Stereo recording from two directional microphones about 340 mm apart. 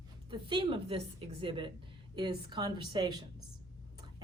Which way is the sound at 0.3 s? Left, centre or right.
Centre.